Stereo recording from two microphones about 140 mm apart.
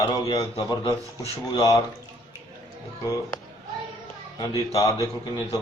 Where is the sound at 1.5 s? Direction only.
25° left (ahead or behind).